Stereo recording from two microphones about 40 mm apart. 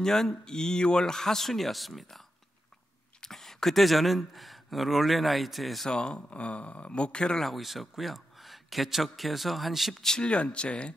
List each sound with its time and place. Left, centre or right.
0.0 s speech: centre
3.2 s speech: centre
5.9 s speech: left
7.3 s speech: centre
10.0 s speech: left